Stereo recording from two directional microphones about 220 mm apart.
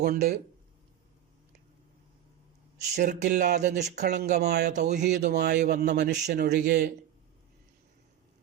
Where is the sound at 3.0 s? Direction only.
45° right (ahead or behind).